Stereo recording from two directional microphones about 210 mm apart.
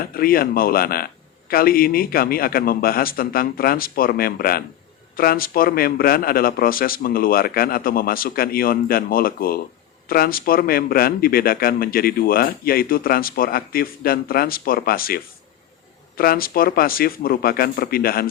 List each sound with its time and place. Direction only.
0.0 s speech: 45° left (ahead or behind)